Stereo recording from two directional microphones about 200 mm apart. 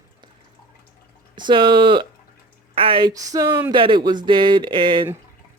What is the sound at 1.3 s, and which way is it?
Speech, 25° right (ahead or behind).